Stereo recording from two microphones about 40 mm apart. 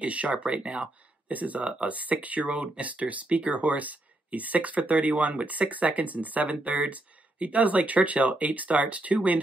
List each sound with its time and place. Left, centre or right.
0.0 s speech: right
1.3 s speech: right